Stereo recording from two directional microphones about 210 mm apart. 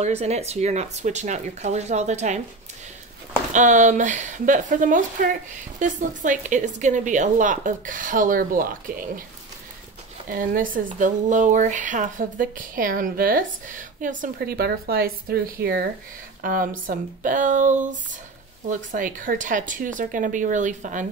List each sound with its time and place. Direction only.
0.0 s speech: 30° right (ahead or behind)
3.5 s speech: 35° right (ahead or behind)
10.3 s speech: 40° right (ahead or behind)